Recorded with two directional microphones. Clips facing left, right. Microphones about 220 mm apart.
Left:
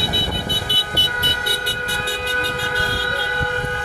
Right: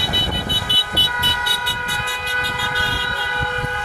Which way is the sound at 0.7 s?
45° left (ahead or behind).